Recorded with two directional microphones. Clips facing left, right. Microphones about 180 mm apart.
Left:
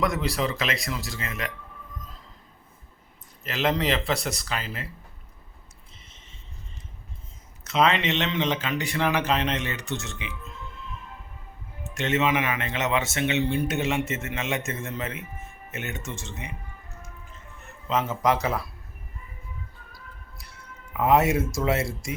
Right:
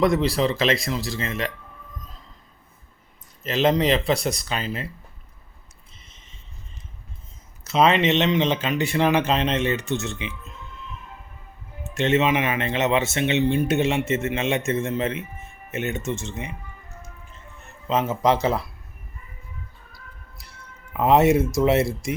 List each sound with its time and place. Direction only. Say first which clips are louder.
0.0 s speech: right 6 dB; 30° right (ahead or behind)
3.4 s speech: right 5 dB; 20° right (ahead or behind)
7.7 s speech: right 4 dB; 20° right (ahead or behind)
11.8 s speech: right 5 dB; 25° right (ahead or behind)
17.8 s speech: right 3 dB; 25° right (ahead or behind)
20.9 s speech: right 4 dB; 25° right (ahead or behind)